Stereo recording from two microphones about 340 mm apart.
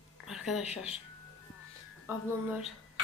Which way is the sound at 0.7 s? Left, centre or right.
Centre.